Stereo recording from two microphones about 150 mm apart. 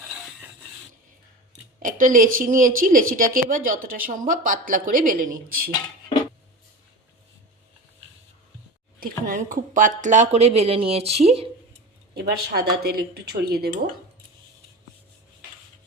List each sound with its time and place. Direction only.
1.8 s a woman's voice: 60° right (ahead or behind); by 5.7 s 75° right (ahead or behind)
9.0 s speech: 70° right (ahead or behind); by 11.4 s 45° right (ahead or behind)
12.1 s speech: 90° right